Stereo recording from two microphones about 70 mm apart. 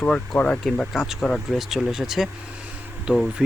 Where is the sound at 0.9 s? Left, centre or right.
Centre.